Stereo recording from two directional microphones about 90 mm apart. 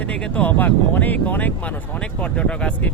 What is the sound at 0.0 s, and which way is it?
Speech, 15° left (ahead or behind).